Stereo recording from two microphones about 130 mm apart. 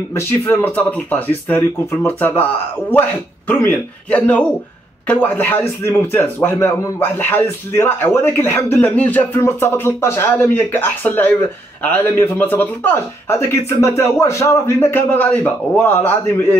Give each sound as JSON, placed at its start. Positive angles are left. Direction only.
{"t": 0.1, "sound": "a man's voice", "side_deg": 20}